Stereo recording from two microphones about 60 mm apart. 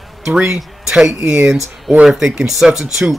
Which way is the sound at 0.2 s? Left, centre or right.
Centre.